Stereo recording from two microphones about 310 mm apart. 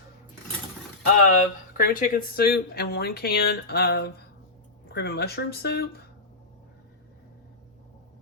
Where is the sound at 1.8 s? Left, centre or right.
Left.